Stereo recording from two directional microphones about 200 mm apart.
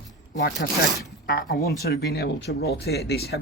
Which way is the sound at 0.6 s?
45° left (ahead or behind).